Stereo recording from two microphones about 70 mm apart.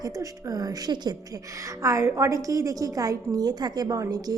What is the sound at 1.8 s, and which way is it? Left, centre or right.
A woman's voice, right.